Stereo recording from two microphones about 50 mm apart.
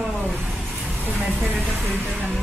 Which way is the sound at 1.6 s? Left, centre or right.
Right.